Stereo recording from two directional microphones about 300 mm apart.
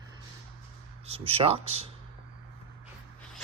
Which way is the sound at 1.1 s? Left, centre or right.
Centre.